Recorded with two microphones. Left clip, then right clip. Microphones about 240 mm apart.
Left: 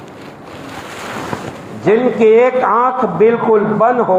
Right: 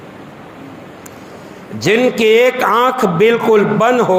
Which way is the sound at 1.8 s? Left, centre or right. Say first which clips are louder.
Left 1 dB; right.